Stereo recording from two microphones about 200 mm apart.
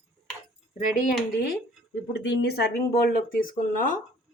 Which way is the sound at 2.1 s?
55° left (ahead or behind).